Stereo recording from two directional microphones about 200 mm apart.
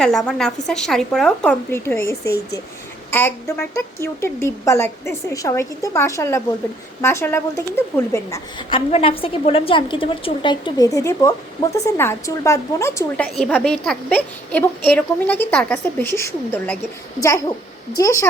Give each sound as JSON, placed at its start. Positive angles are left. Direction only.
{"t": 0.0, "sound": "speech", "side_deg": 5}
{"t": 2.2, "sound": "speech", "side_deg": 55}
{"t": 3.1, "sound": "a woman's voice", "side_deg": 10}
{"t": 17.9, "sound": "a woman's voice", "side_deg": 15}